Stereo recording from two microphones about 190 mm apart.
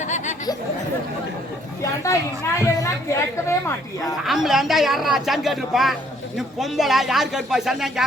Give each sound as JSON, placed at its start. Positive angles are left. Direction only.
{"t": 0.0, "sound": "a sound", "side_deg": 40}
{"t": 2.6, "sound": "speech", "side_deg": 15}
{"t": 4.0, "sound": "speech", "side_deg": 0}